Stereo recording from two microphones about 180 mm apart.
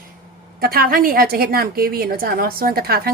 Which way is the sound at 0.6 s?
55° right (ahead or behind).